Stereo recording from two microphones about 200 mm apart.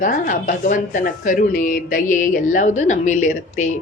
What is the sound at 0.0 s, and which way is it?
A woman's voice, 45° left (ahead or behind).